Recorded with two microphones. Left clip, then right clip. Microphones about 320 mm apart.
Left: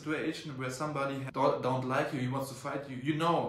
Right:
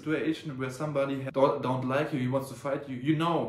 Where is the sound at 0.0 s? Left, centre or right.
Centre.